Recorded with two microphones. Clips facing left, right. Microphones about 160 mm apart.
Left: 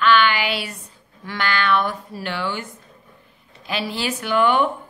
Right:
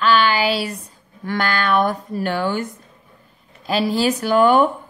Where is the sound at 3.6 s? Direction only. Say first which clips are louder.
Right 7 dB; 40° right (ahead or behind).